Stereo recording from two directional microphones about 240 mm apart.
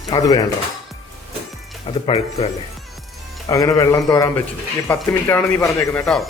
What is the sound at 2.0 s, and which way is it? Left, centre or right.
Speech, left.